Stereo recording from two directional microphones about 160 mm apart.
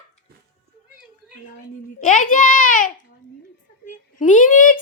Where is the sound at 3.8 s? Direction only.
55° left (ahead or behind).